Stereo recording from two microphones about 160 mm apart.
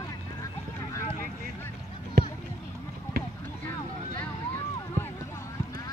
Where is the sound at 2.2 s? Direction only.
75° right (ahead or behind).